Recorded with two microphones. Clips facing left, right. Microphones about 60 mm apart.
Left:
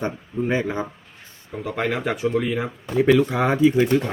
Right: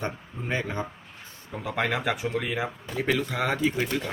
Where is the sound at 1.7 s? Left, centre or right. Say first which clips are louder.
Left 3 dB; centre.